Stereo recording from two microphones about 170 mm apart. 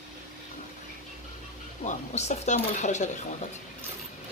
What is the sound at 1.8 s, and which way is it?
Speech, 45° left (ahead or behind).